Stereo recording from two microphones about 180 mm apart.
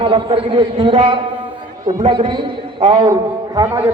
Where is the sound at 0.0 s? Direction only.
30° right (ahead or behind).